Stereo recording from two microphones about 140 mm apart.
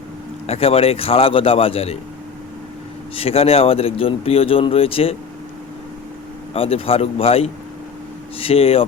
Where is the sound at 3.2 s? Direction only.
45° left (ahead or behind).